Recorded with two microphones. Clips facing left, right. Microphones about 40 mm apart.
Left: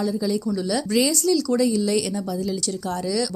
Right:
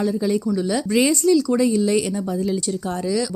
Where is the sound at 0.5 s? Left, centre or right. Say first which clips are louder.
Right 2 dB; right.